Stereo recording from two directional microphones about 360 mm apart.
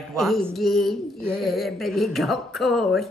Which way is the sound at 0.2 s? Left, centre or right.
Centre.